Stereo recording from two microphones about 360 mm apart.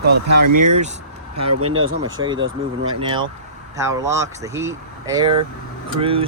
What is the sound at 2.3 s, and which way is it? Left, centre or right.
Speech, right.